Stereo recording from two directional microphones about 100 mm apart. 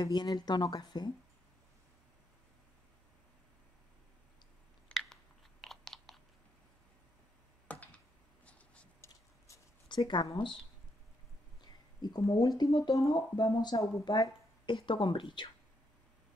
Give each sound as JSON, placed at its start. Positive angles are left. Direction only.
{"t": 0.0, "sound": "speech", "side_deg": 40}
{"t": 4.9, "sound": "chewing", "side_deg": 5}
{"t": 7.6, "sound": "computer keyboard", "side_deg": 15}
{"t": 8.5, "sound": "a sound", "side_deg": 10}
{"t": 9.8, "sound": "speech", "side_deg": 50}
{"t": 12.3, "sound": "speech", "side_deg": 40}